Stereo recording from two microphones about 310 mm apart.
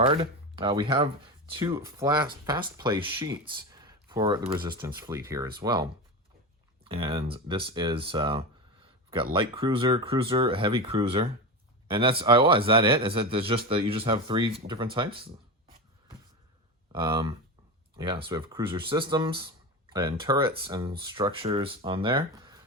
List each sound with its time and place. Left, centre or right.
0.0 s speech: centre
16.9 s speech: centre